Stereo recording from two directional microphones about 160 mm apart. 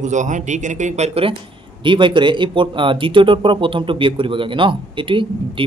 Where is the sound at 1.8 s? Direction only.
30° right (ahead or behind).